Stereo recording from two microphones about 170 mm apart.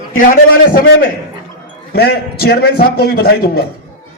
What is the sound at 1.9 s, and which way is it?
A man's voice, 65° left (ahead or behind).